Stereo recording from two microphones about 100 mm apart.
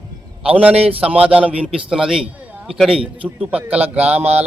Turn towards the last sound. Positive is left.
turn(degrees=-15)  # may be behind; listen again after turning